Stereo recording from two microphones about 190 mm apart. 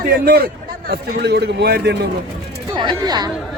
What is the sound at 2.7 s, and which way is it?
Speech, 25° right (ahead or behind).